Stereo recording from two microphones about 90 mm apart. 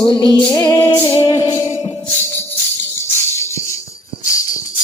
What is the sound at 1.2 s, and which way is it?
Music, 45° left (ahead or behind).